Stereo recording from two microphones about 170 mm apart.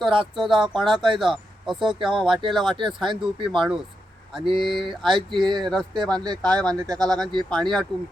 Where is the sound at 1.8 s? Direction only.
30° right (ahead or behind).